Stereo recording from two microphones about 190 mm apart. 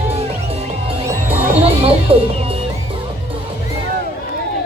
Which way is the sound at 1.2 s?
30° right (ahead or behind).